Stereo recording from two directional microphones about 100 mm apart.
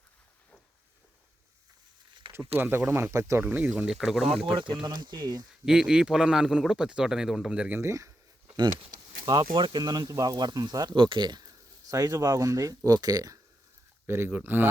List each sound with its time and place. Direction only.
2.6 s speech: 25° right (ahead or behind)
3.4 s a man's voice: 15° right (ahead or behind)
4.8 s speech: 45° right (ahead or behind)
5.6 s a man's voice: 5° right (ahead or behind)
7.8 s speech: 30° right (ahead or behind)
9.2 s speech: 50° right (ahead or behind)
14.1 s speech: 20° right (ahead or behind)